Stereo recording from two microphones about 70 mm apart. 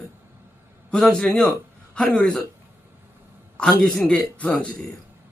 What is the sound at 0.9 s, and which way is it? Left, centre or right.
Speech, centre.